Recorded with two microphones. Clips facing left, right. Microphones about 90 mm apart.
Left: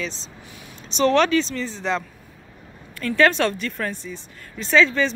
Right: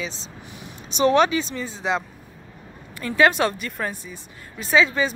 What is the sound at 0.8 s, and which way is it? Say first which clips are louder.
Speech: even; 10° right (ahead or behind).